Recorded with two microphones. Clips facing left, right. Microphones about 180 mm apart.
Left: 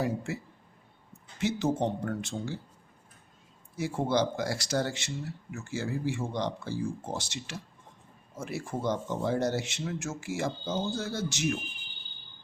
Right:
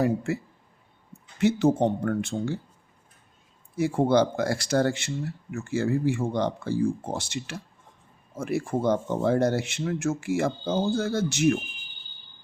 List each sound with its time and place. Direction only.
1.4 s speech: 60° right (ahead or behind)
3.8 s speech: 55° right (ahead or behind)